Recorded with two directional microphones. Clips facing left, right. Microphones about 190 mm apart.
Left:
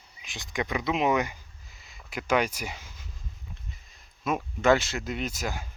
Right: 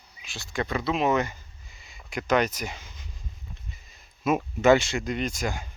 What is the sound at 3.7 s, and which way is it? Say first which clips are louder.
Speech: right 1 dB; centre (ahead or behind).